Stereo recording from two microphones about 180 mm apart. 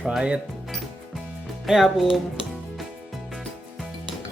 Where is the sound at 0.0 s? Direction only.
5° right (ahead or behind).